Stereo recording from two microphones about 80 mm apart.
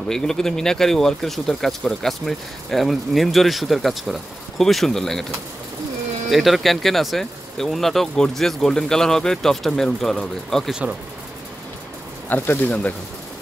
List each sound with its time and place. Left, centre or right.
0.1 s speech: centre
6.3 s speech: centre
10.7 s speech: centre
12.3 s speech: left